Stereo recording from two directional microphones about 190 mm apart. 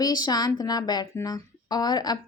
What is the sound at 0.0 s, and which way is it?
A woman's voice, 20° left (ahead or behind).